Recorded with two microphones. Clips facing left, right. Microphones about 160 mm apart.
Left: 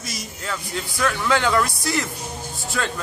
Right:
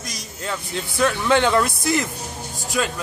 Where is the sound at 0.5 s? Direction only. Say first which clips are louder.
Right 2 dB; 25° right (ahead or behind).